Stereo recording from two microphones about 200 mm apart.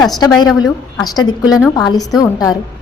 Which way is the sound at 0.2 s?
20° left (ahead or behind).